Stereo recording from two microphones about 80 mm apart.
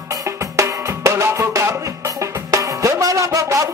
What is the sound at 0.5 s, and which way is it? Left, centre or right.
Drum, right.